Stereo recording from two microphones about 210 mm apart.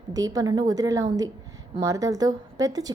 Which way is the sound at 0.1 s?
15° right (ahead or behind).